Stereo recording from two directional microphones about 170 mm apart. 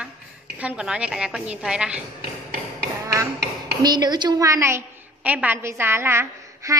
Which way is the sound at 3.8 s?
25° right (ahead or behind).